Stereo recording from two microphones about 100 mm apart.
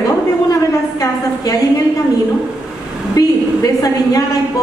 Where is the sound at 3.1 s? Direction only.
40° left (ahead or behind).